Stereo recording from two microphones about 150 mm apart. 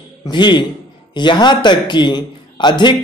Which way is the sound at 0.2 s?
30° left (ahead or behind).